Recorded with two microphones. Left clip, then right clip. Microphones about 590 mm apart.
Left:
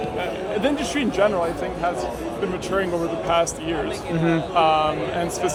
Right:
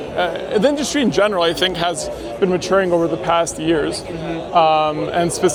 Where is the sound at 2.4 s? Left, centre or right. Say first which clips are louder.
Right 10 dB; right.